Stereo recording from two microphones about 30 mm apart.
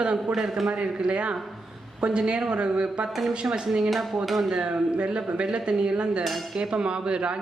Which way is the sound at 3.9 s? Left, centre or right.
Centre.